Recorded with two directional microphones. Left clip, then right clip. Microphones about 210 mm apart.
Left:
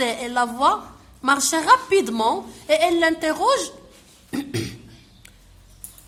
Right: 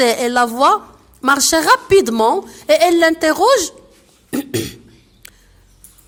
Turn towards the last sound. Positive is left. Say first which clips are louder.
# right 7 dB
turn(degrees=-40)  # may be behind; listen again after turning